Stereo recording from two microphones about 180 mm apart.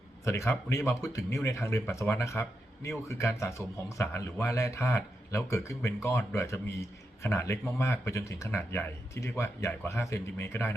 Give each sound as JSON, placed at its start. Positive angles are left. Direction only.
{"t": 0.3, "sound": "a man's voice", "side_deg": 15}